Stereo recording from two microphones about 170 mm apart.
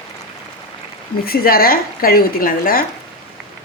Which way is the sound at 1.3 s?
60° left (ahead or behind).